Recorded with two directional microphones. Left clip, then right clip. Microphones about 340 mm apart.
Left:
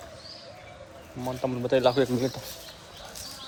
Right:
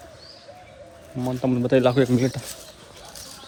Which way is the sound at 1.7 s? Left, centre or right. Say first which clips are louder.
Right 3 dB; centre.